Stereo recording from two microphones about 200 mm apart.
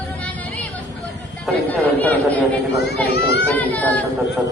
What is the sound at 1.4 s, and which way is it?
Chatter, 10° left (ahead or behind).